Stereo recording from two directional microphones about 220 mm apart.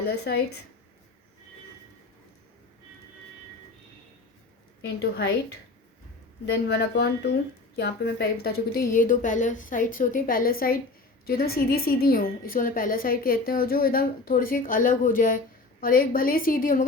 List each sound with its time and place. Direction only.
0.0 s a woman's voice: 45° left (ahead or behind)
4.9 s a woman's voice: 50° left (ahead or behind)
6.4 s a woman's voice: 50° left (ahead or behind)